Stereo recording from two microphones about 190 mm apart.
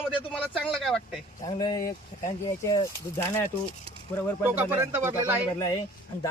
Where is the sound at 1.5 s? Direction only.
25° left (ahead or behind).